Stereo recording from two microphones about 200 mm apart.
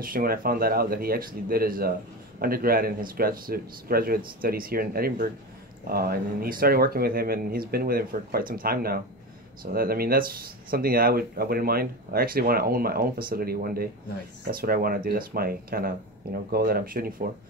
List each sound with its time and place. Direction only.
0.0 s speech: 45° right (ahead or behind)